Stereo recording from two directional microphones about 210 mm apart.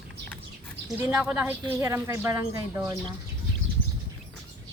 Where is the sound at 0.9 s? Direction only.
10° right (ahead or behind).